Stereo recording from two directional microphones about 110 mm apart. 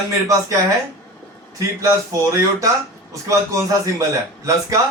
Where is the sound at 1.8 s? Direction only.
30° right (ahead or behind).